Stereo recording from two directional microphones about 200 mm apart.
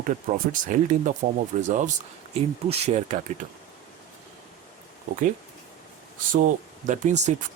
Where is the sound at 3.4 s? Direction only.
45° right (ahead or behind).